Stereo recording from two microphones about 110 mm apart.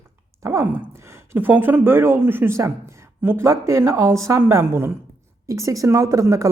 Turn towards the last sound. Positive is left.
turn(degrees=-30)  # may be behind; listen again after turning